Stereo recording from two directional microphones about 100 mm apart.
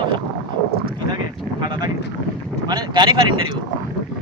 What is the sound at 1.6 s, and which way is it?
Speech, 50° right (ahead or behind).